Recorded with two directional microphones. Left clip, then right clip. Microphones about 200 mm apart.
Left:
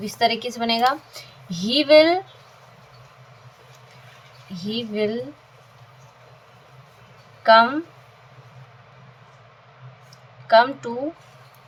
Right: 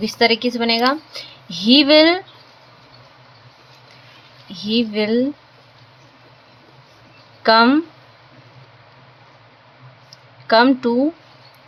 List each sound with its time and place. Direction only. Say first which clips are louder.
0.0 s a woman's voice: right 5 dB; 35° right (ahead or behind)
4.8 s a woman's voice: right 5 dB; 35° right (ahead or behind)
7.4 s a woman's voice: right 1 dB; 35° right (ahead or behind)
10.4 s a woman's voice: right 2 dB; 35° right (ahead or behind)